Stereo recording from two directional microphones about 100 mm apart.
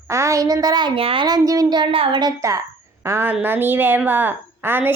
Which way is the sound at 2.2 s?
40° right (ahead or behind).